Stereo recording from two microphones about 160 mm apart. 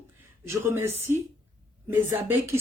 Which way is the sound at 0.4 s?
15° right (ahead or behind).